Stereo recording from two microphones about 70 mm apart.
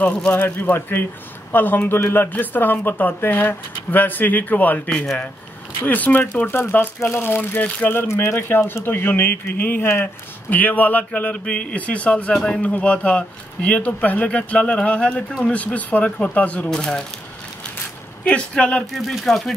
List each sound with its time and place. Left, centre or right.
0.0 s a man's voice: centre
0.3 s a man's voice: left; by 17.0 s centre
18.2 s a man's voice: centre
18.9 s speech: centre